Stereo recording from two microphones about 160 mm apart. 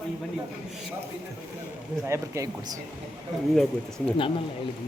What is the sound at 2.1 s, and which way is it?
Speech, 20° right (ahead or behind).